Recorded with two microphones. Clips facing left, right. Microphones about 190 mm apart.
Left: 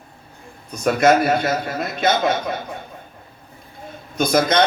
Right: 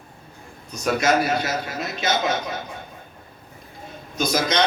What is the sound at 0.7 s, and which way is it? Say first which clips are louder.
A man's voice: left 5 dB; 55° left (ahead or behind).